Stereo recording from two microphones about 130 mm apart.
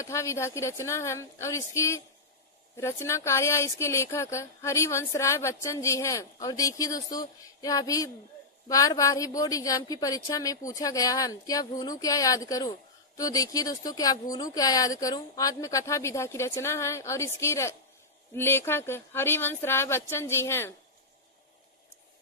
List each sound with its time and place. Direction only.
0.0 s speech: 25° left (ahead or behind)